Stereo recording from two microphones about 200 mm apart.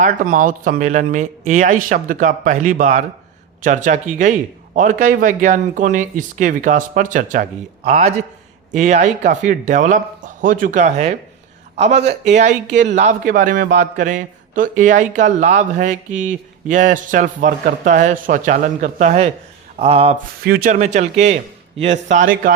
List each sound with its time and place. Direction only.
0.0 s a man's voice: 40° right (ahead or behind)
19.8 s a sound: 30° right (ahead or behind)
20.4 s a man's voice: 50° right (ahead or behind)